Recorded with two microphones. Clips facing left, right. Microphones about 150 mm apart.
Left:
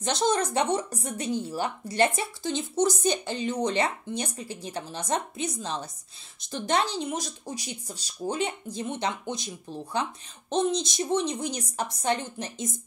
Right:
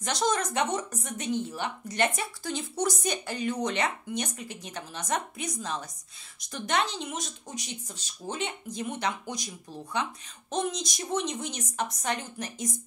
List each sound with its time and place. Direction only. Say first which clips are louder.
0.0 s a woman's voice: left 3 dB; 30° left (ahead or behind)